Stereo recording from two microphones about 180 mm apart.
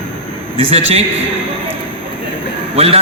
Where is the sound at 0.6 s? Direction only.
35° right (ahead or behind).